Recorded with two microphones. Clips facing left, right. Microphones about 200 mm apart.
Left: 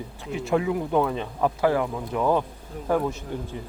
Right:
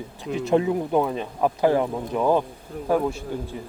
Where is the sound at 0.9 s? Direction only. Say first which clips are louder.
Right 1 dB; 15° right (ahead or behind).